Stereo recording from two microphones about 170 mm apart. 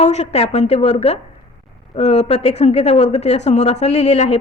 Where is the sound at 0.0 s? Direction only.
40° left (ahead or behind).